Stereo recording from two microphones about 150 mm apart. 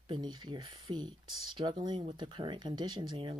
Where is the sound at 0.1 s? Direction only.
30° right (ahead or behind).